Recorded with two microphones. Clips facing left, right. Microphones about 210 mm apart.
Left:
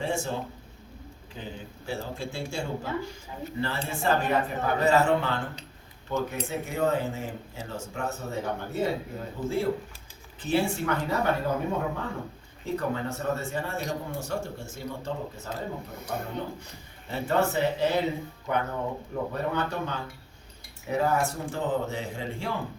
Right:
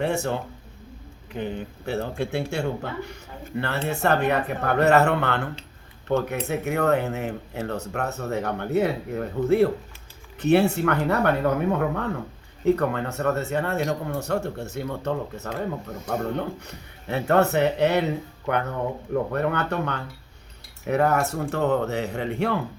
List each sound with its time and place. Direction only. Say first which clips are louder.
0.0 s speech: right 5 dB; 65° right (ahead or behind)